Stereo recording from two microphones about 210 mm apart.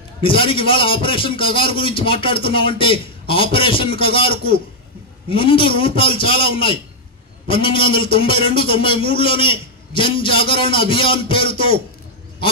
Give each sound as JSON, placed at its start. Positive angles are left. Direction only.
{"t": 0.2, "sound": "a man's voice", "side_deg": 25}